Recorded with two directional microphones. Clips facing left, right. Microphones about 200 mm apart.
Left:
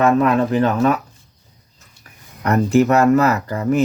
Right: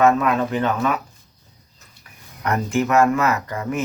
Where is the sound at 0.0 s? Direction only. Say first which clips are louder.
Left 2 dB; 35° left (ahead or behind).